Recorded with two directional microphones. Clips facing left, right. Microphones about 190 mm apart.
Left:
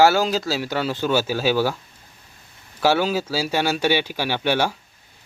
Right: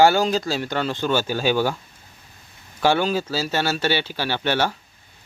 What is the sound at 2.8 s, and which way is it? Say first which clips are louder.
Speech: even; 5° left (ahead or behind).